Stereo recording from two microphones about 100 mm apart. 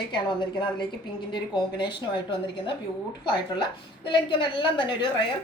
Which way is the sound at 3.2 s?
50° left (ahead or behind).